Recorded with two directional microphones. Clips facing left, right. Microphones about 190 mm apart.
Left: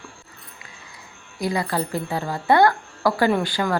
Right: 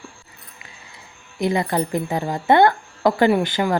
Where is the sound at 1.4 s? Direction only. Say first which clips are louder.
Right 3 dB; 20° right (ahead or behind).